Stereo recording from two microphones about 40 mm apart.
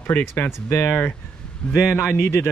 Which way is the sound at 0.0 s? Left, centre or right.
Left.